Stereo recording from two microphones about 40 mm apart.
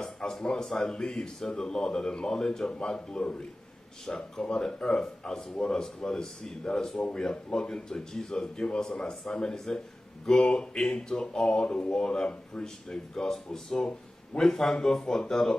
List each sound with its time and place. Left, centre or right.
0.0 s a man's voice: centre
13.7 s a sound: left
14.4 s a man's voice: centre